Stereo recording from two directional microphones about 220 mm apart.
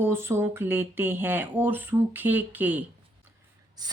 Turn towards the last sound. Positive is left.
turn(degrees=-15)  # may be behind; listen again after turning